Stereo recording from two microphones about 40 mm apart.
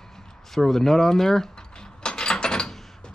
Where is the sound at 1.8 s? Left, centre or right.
Centre.